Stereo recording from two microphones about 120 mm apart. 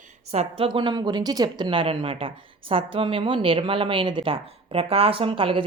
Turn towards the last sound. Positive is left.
turn(degrees=-45)  # may be behind; listen again after turning